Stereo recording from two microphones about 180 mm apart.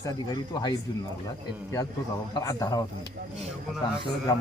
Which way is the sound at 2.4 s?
20° left (ahead or behind).